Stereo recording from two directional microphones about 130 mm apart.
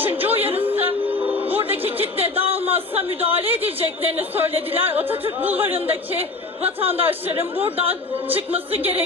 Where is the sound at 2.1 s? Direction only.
45° right (ahead or behind).